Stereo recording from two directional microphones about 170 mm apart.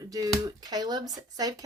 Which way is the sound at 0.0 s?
20° right (ahead or behind).